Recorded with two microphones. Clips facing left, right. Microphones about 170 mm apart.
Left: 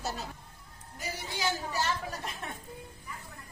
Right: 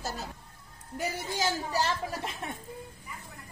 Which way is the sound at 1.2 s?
40° right (ahead or behind).